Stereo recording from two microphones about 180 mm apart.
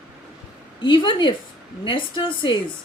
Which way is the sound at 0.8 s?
25° left (ahead or behind).